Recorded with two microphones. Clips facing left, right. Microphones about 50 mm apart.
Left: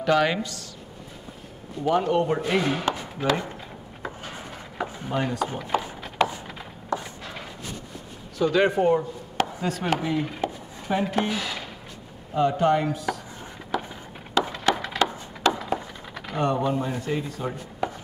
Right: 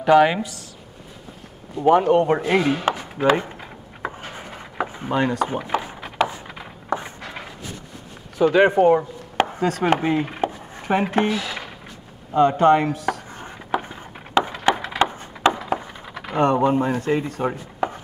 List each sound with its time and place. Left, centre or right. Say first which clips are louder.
0.0 s speech: right 6 dB; centre
1.8 s chopping: right 6 dB; right
4.0 s wood: right 5 dB; right
5.1 s speech: right 6 dB; right
5.5 s wood: right 3 dB; right
6.2 s a sound: right 2 dB; centre
6.9 s a sound: right 3 dB; right
8.4 s chopping: right 6 dB; right
12.4 s speech: right 6 dB; right
13.7 s a sound: right 4 dB; right
14.4 s wood: right 4 dB; right
16.3 s speech: right 6 dB; right
17.5 s chopping: right 4 dB; right